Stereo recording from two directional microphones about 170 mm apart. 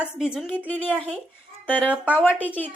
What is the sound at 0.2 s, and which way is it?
Speech, 5° right (ahead or behind).